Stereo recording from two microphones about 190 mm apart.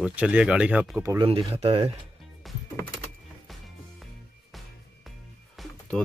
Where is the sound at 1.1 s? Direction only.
30° right (ahead or behind).